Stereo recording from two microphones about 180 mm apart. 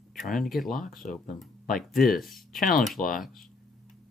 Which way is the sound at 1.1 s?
45° left (ahead or behind).